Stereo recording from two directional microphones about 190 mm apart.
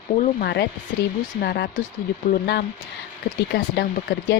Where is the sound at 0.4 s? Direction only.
60° left (ahead or behind).